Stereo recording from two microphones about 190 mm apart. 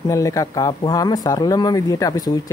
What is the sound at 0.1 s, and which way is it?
Speech, 15° left (ahead or behind).